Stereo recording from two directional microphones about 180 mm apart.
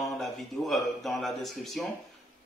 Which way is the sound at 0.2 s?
Centre (ahead or behind).